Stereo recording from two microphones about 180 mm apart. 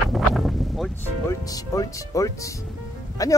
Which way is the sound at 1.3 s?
20° left (ahead or behind).